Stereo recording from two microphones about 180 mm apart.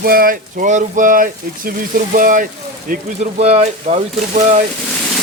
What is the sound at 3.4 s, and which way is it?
Speech, 35° right (ahead or behind).